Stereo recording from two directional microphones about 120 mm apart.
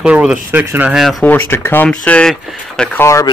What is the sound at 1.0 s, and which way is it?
Speech, centre (ahead or behind).